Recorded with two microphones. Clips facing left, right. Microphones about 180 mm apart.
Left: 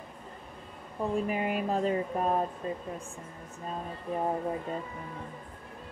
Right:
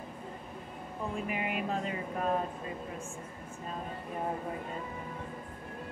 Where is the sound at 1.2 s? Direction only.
40° left (ahead or behind).